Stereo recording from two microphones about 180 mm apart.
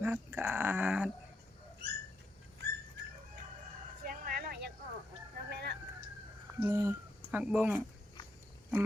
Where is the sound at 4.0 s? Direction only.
55° right (ahead or behind).